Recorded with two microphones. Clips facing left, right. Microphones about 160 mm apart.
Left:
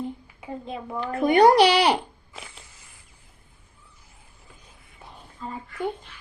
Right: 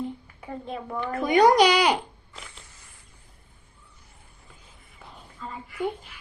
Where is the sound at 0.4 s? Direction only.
10° left (ahead or behind).